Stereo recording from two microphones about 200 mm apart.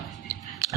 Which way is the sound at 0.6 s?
15° right (ahead or behind).